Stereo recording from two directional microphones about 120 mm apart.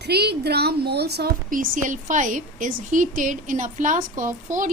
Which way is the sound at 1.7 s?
90° right.